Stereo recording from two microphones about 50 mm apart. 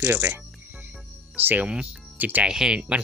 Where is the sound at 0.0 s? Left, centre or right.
Right.